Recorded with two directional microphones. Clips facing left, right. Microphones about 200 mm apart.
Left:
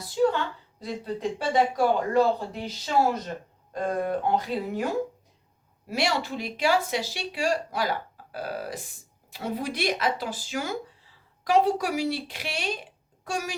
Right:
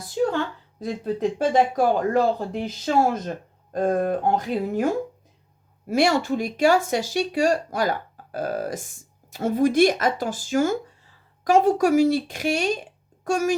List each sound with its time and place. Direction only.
0.2 s a sound: 50° right (ahead or behind)
0.8 s speech: 45° right (ahead or behind)
5.9 s speech: 45° right (ahead or behind)